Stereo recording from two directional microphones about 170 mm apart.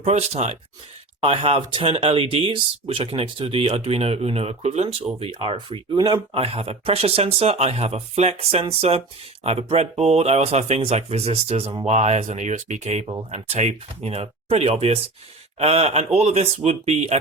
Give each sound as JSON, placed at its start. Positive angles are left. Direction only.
{"t": 0.0, "sound": "speech", "side_deg": -40}
{"t": 6.3, "sound": "speech", "side_deg": -35}